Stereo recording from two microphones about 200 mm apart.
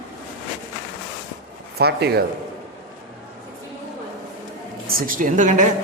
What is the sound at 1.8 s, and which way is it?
Speech, 55° right (ahead or behind).